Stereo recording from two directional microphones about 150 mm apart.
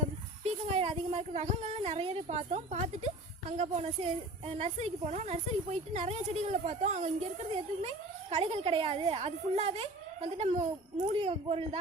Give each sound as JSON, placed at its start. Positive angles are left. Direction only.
{"t": 0.4, "sound": "speech", "side_deg": -45}
{"t": 8.3, "sound": "a woman's voice", "side_deg": -45}